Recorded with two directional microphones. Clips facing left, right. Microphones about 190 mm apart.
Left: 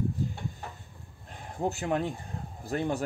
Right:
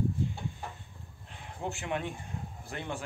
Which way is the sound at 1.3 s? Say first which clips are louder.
Left 6 dB; 40° left (ahead or behind).